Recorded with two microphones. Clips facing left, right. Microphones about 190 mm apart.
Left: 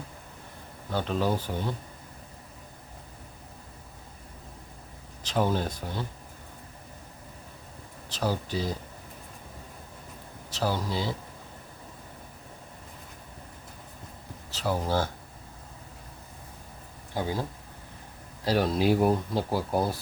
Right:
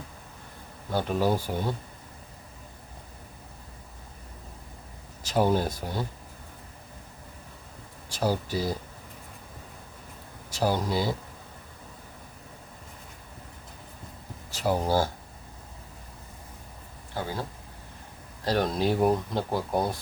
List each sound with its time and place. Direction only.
0.9 s speech: 10° right (ahead or behind)
5.2 s speech: 10° right (ahead or behind)
8.1 s speech: 10° right (ahead or behind)
10.5 s speech: 10° right (ahead or behind)
14.5 s speech: 10° right (ahead or behind)
17.2 s speech: 15° left (ahead or behind)
18.4 s speech: 5° left (ahead or behind)